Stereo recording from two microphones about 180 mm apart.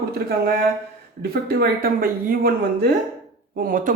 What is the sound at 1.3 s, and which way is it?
Speech, 55° right (ahead or behind).